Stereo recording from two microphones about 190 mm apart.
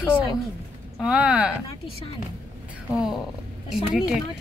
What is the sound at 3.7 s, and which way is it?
Speech, centre (ahead or behind).